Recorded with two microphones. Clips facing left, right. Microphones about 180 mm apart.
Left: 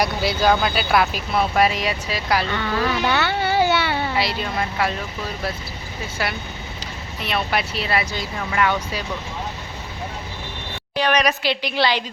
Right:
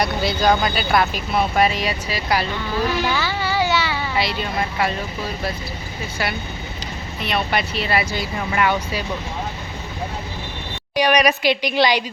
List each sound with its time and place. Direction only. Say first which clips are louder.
0.0 s speech: even; 5° left (ahead or behind)
3.1 s a sound: left 2 dB; 60° left (ahead or behind)
4.2 s speech: right 1 dB; centre (ahead or behind)
6.2 s speech: right 1 dB; centre (ahead or behind)
10.9 s a woman's voice: right 3 dB; 15° right (ahead or behind)